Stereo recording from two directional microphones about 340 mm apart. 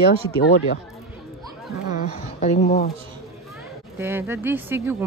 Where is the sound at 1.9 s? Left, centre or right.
Left.